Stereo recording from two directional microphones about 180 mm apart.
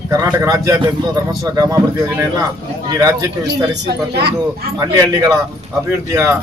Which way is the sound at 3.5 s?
65° right (ahead or behind).